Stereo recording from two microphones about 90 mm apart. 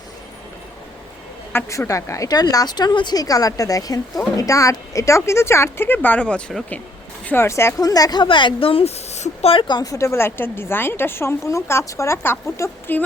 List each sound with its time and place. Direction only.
1.5 s a woman's voice: 30° left (ahead or behind); by 6.4 s 15° left (ahead or behind)
7.3 s a woman's voice: 30° left (ahead or behind)
7.8 s speech: 40° left (ahead or behind)
8.2 s a woman's voice: 65° left (ahead or behind); by 8.8 s 85° left
9.5 s speech: 65° left (ahead or behind)
9.8 s a woman's voice: 35° left (ahead or behind)